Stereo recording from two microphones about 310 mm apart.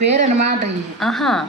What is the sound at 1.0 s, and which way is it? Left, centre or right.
Speech, centre.